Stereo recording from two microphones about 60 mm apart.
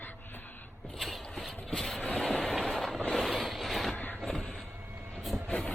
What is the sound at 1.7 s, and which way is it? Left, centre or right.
Vehicle, centre.